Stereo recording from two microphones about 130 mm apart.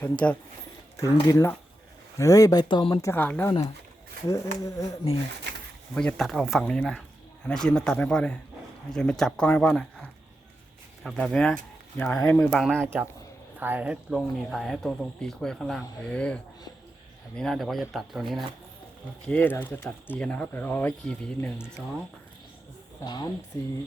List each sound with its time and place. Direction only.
0.0 s speech: 10° left (ahead or behind)
0.9 s speech: 25° left (ahead or behind)
3.1 s speech: 15° left (ahead or behind)
4.6 s speech: 25° left (ahead or behind)
5.9 s speech: 10° left (ahead or behind)
12.3 s speech: 15° left (ahead or behind)
13.6 s speech: 15° right (ahead or behind)
14.1 s speech: centre (ahead or behind)
19.3 s speech: 15° left (ahead or behind)
23.0 s speech: 35° left (ahead or behind)